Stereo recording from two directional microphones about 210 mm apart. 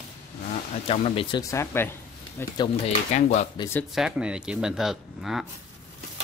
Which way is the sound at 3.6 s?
10° left (ahead or behind).